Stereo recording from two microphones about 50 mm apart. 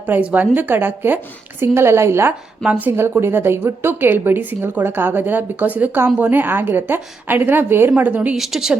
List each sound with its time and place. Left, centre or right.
0.3 s speech: right
1.6 s a woman's voice: right
2.6 s speech: right
2.9 s a woman's voice: right
8.4 s speech: centre